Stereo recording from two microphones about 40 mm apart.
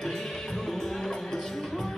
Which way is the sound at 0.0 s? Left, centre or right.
Centre.